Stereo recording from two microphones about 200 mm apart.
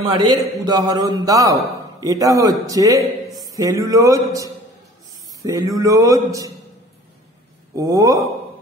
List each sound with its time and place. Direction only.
0.2 s a man's voice: 20° right (ahead or behind)
7.7 s a man's voice: 20° right (ahead or behind)